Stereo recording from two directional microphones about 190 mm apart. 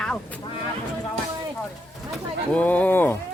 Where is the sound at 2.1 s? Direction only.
5° left (ahead or behind).